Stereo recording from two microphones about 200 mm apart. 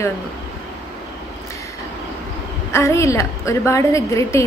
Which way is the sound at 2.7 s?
15° left (ahead or behind).